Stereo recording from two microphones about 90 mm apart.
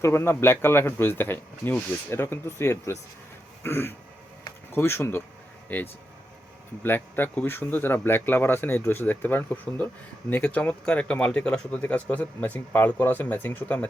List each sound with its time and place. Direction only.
0.0 s speech: 30° left (ahead or behind)